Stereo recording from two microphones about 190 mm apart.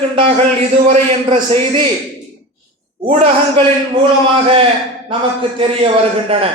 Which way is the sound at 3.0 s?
30° right (ahead or behind).